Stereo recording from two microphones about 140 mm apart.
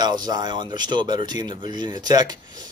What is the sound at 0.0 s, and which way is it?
Speech, 30° right (ahead or behind).